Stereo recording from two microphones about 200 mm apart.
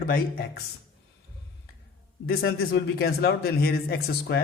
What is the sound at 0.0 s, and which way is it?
Speech, 50° left (ahead or behind).